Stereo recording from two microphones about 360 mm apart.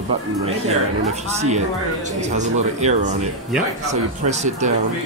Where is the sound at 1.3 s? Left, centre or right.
Centre.